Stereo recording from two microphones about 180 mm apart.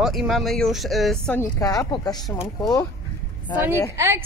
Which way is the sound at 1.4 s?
20° left (ahead or behind).